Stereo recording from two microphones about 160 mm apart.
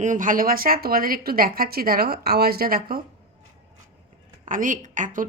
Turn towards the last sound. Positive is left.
turn(degrees=-55)  # may be behind; listen again after turning